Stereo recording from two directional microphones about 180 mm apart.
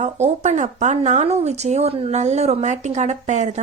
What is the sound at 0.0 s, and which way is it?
A woman's voice, 40° right (ahead or behind).